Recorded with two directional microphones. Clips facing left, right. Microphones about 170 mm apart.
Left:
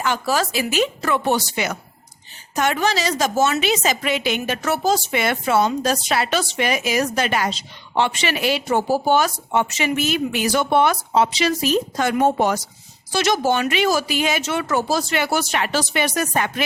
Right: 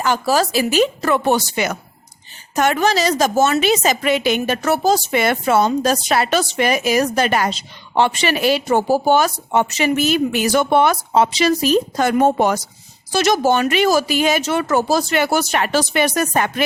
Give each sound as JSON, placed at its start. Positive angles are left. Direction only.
{"t": 0.0, "sound": "a woman's voice", "side_deg": -40}